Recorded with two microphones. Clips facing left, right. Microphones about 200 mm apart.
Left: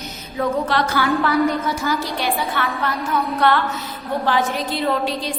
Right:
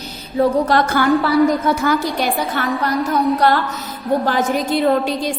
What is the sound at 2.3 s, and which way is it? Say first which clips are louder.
Music: right 3 dB; 40° right (ahead or behind).